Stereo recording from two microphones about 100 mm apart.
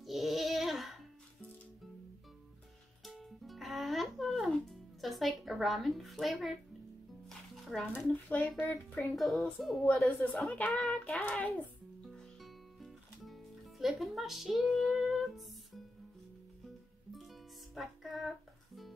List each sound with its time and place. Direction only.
0.0 s music: centre (ahead or behind)
3.0 s music: centre (ahead or behind)
7.9 s speech: 20° left (ahead or behind)
9.1 s a child's voice: centre (ahead or behind)
12.0 s music: centre (ahead or behind)
17.1 s music: centre (ahead or behind)